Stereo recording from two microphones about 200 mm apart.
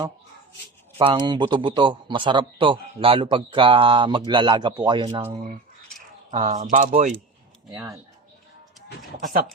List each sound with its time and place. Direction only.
0.9 s a man's voice: 25° right (ahead or behind)
6.5 s speech: 40° right (ahead or behind)
9.2 s speech: 40° right (ahead or behind)